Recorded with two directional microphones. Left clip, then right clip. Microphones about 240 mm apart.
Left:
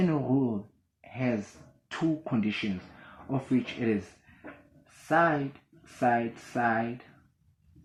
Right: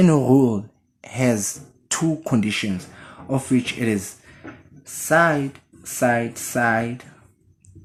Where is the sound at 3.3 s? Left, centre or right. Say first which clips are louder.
Right 8 dB; right.